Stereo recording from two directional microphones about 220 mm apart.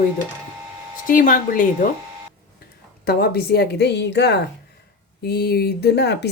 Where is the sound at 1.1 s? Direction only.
40° left (ahead or behind).